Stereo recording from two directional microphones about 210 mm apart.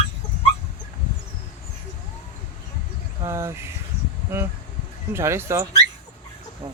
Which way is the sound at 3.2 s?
15° right (ahead or behind).